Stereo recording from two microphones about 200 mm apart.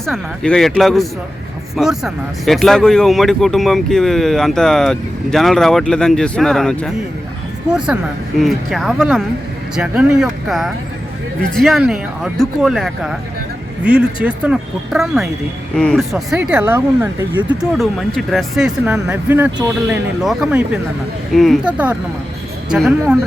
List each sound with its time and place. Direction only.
0.0 s speech: centre (ahead or behind)